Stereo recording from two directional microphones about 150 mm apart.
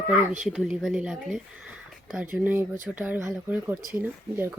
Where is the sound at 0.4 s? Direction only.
Centre (ahead or behind).